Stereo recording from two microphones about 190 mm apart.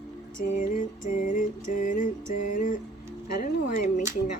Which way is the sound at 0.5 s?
45° left (ahead or behind).